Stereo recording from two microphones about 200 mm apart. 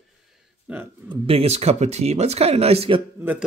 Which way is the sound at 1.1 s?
30° right (ahead or behind).